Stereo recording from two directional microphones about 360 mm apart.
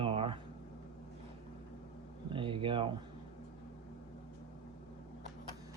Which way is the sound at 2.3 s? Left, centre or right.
Centre.